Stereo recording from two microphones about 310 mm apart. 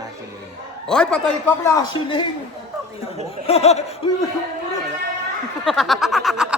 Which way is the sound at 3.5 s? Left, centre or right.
Centre.